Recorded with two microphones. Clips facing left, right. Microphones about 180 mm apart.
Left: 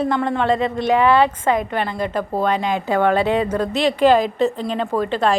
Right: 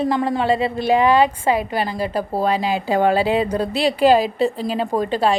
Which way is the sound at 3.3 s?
15° right (ahead or behind).